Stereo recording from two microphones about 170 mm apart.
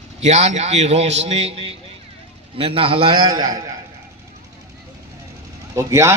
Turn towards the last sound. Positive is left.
turn(degrees=-15)  # may be behind; listen again after turning